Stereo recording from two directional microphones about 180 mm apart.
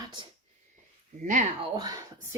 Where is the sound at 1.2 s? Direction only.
45° right (ahead or behind).